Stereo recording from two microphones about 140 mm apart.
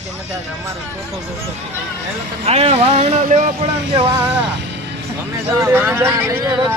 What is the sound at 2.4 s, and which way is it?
Speech, 45° right (ahead or behind).